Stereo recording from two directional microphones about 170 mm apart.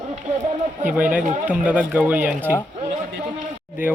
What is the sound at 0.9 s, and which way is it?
Speech, 10° right (ahead or behind).